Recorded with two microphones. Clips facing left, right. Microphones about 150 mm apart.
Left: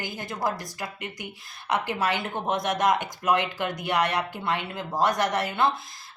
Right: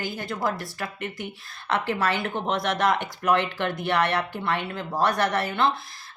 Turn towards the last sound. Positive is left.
turn(degrees=20)  # may be behind; listen again after turning